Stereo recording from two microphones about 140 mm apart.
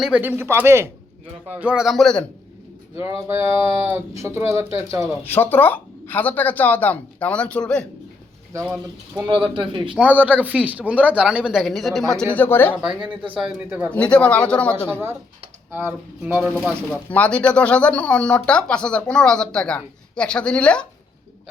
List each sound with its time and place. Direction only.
0.0 s speech: 10° right (ahead or behind)
2.9 s speech: 15° right (ahead or behind)
5.2 s speech: 15° left (ahead or behind)
9.2 s speech: 35° right (ahead or behind)
9.9 s speech: 10° right (ahead or behind); by 12.7 s 15° left (ahead or behind)
12.8 s speech: 5° right (ahead or behind)
13.9 s speech: 10° left (ahead or behind)
14.8 s speech: 15° right (ahead or behind)
16.6 s speech: 10° left (ahead or behind)